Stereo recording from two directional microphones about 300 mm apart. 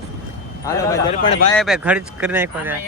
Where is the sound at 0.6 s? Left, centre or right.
Centre.